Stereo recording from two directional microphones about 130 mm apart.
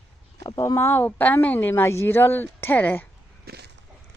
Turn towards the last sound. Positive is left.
turn(degrees=15)  # may be behind; listen again after turning